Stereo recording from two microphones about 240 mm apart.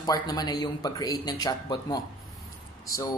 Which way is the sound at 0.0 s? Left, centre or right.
Centre.